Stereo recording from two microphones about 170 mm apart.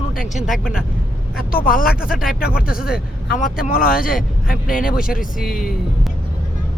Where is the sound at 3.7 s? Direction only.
60° left (ahead or behind).